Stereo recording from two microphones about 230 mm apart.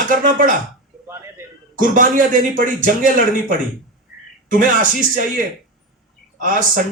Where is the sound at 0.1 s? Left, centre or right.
Right.